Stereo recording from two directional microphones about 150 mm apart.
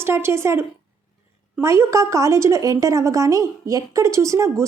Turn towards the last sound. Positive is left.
turn(degrees=-20)  # may be behind; listen again after turning